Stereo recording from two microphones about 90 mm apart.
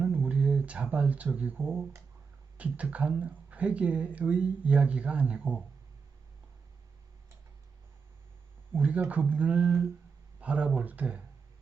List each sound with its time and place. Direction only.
0.0 s a sound: 15° right (ahead or behind)
2.6 s speech: 15° right (ahead or behind)
8.7 s speech: 15° right (ahead or behind)